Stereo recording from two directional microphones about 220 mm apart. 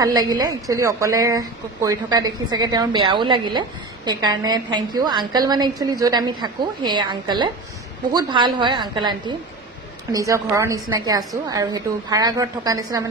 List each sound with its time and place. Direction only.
0.0 s a woman's voice: 20° right (ahead or behind)
10.1 s a woman's voice: 15° right (ahead or behind)